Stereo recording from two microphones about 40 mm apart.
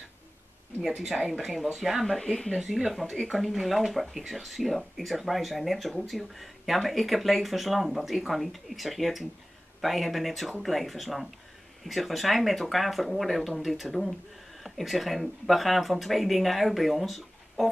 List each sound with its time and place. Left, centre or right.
0.8 s a woman's voice: centre
2.0 s speech: centre
2.5 s speech: centre